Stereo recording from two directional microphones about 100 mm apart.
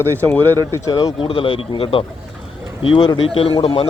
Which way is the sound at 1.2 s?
65° left (ahead or behind).